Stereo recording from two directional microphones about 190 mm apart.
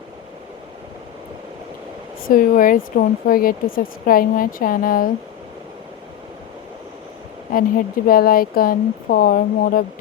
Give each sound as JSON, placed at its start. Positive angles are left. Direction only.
{"t": 2.3, "sound": "speech", "side_deg": 45}
{"t": 7.5, "sound": "speech", "side_deg": 50}